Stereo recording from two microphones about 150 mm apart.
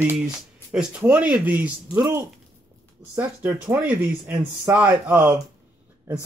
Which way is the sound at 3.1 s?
10° right (ahead or behind).